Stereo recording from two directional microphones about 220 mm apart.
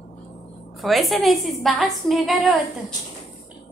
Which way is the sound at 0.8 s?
Centre (ahead or behind).